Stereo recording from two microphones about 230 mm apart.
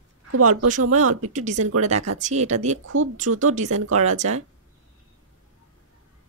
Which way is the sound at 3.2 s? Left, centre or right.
Right.